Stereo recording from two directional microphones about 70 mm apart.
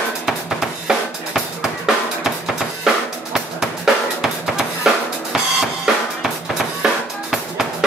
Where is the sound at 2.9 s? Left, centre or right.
Centre.